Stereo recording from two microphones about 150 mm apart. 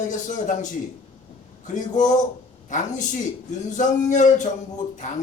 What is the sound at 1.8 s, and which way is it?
Speech, 55° left (ahead or behind).